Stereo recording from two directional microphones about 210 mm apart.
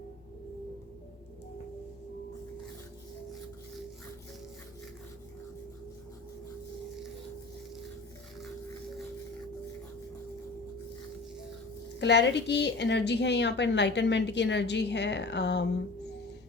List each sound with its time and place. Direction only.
11.9 s a woman's voice: 55° left (ahead or behind)